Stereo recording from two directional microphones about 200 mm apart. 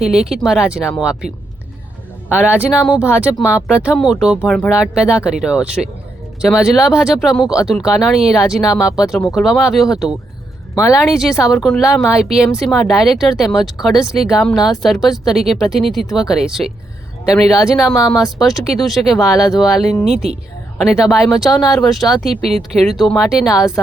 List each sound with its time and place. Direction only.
0.0 s speech: 5° right (ahead or behind)
2.3 s speech: 5° right (ahead or behind)
17.9 s speech: 15° left (ahead or behind)
18.2 s speech: centre (ahead or behind)